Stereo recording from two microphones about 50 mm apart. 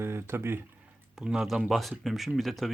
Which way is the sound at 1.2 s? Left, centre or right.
Centre.